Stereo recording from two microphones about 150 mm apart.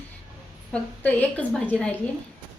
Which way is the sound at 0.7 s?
10° left (ahead or behind).